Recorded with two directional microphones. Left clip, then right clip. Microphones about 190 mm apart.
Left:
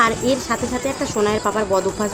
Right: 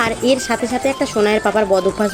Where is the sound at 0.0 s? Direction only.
20° right (ahead or behind).